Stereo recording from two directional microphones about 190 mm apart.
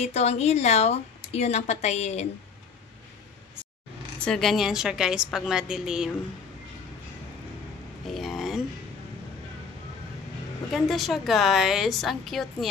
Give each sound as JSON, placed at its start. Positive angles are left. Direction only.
{"t": 0.0, "sound": "speech", "side_deg": 35}
{"t": 4.2, "sound": "a woman's voice", "side_deg": 5}
{"t": 8.1, "sound": "a sound", "side_deg": 0}
{"t": 10.7, "sound": "a woman's voice", "side_deg": 0}